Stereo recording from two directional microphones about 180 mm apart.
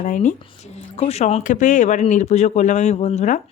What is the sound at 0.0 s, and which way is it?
Speech, 45° left (ahead or behind).